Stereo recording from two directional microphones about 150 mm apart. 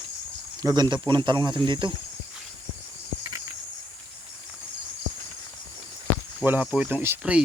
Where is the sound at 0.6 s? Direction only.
25° right (ahead or behind).